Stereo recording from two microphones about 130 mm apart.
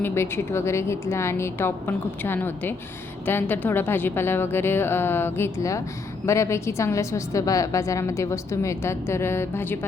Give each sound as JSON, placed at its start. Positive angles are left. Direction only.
{"t": 0.0, "sound": "a woman's voice", "side_deg": 20}